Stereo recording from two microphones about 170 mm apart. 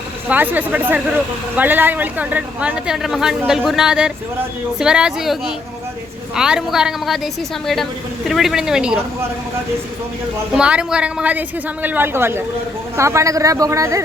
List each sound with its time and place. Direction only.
0.3 s a woman's voice: 10° right (ahead or behind)
8.3 s a woman's voice: centre (ahead or behind)
10.5 s a woman's voice: 5° right (ahead or behind)